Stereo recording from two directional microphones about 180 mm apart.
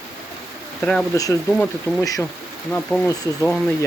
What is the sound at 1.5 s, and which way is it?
Speech, 5° left (ahead or behind).